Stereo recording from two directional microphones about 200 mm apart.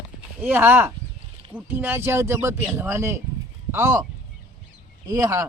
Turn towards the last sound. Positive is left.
turn(degrees=-15)  # may be behind; listen again after turning